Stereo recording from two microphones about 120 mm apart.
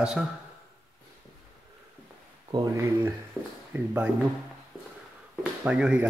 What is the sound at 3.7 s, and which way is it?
Speech, 15° right (ahead or behind).